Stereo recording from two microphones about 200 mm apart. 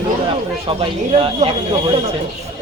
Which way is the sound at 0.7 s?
30° right (ahead or behind).